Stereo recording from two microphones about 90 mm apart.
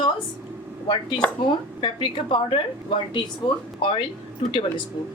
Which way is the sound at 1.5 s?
65° left (ahead or behind).